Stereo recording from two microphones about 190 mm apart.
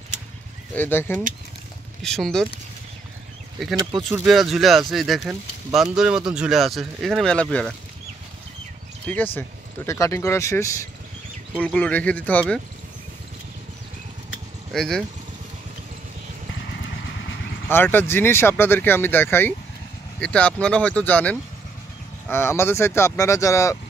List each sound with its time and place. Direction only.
0.7 s speech: 10° left (ahead or behind)
3.7 s speech: 20° right (ahead or behind)
4.1 s speech: 5° right (ahead or behind)
9.0 s speech: 10° left (ahead or behind)
14.7 s speech: centre (ahead or behind)
17.6 s speech: 10° left (ahead or behind)